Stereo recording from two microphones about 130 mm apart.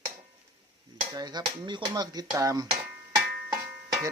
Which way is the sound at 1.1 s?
30° right (ahead or behind).